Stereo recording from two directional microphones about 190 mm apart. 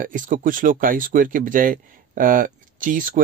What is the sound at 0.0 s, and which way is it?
Speech, 45° right (ahead or behind).